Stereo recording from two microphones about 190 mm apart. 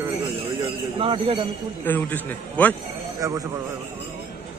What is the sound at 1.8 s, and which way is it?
Speech, 10° left (ahead or behind).